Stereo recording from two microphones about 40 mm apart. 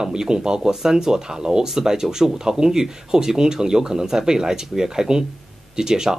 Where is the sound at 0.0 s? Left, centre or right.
Centre.